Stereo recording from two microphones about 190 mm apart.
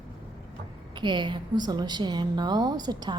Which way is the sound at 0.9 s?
25° right (ahead or behind).